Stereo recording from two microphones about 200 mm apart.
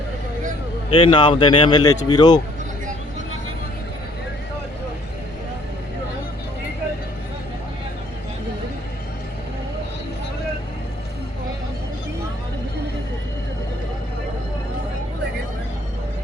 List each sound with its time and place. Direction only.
0.9 s speech: 25° left (ahead or behind)